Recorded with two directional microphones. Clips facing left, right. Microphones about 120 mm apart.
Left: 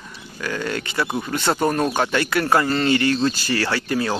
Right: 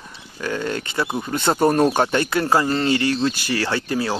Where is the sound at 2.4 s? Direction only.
20° right (ahead or behind).